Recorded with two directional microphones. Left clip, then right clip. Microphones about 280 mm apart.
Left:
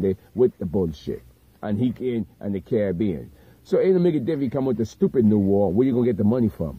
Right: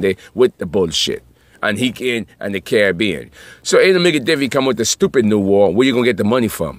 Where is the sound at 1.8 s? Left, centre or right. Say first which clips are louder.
Right 7 dB; right.